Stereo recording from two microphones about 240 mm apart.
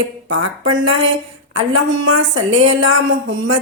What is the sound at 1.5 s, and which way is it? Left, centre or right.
A woman's voice, right.